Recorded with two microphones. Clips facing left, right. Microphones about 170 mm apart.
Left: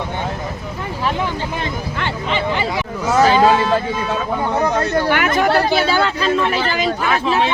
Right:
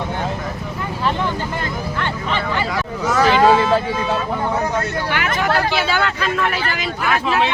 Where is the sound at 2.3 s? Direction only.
15° left (ahead or behind).